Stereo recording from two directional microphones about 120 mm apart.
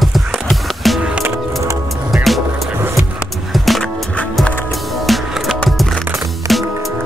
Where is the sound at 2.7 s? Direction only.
20° right (ahead or behind).